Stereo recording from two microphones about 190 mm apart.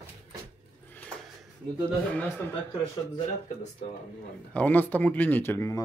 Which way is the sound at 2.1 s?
10° left (ahead or behind).